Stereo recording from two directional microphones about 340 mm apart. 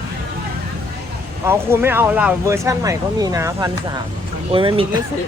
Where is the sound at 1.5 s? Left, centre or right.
Centre.